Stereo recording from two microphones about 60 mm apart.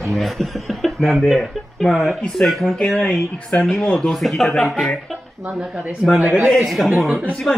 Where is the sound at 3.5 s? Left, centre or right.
Left.